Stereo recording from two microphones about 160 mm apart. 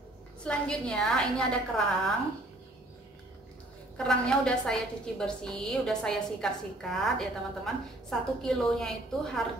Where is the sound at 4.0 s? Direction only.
5° left (ahead or behind).